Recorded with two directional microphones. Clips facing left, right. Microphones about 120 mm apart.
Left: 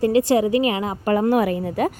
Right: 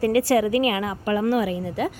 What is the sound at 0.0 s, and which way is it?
Speech, 25° left (ahead or behind).